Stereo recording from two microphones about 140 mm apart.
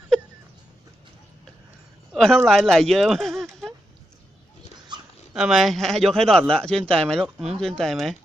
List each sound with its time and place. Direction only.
2.1 s speech: 5° left (ahead or behind)
4.9 s dog: 30° right (ahead or behind)
5.3 s speech: 5° right (ahead or behind)